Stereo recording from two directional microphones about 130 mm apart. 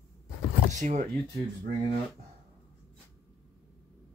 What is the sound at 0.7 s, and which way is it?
Speech, 65° right (ahead or behind).